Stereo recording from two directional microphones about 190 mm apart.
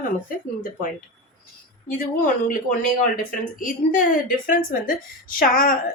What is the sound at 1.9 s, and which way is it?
A woman's voice, 45° left (ahead or behind).